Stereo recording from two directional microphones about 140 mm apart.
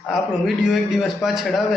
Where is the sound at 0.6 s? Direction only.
Centre (ahead or behind).